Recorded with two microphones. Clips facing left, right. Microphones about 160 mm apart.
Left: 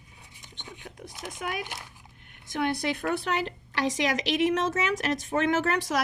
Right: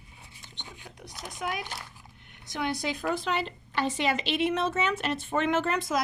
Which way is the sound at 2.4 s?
55° left (ahead or behind).